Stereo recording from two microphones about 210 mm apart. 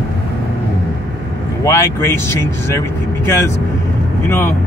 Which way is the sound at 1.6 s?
15° left (ahead or behind).